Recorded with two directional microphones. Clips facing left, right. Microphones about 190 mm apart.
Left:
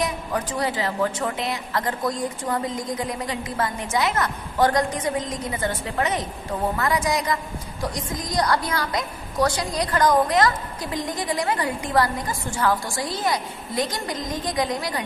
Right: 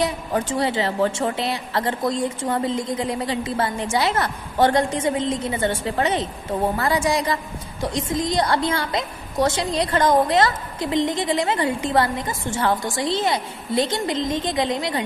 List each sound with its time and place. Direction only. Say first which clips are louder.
0.0 s a woman's voice: right 3 dB; 30° right (ahead or behind)